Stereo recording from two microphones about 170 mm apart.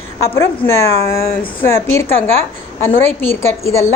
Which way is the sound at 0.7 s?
15° left (ahead or behind).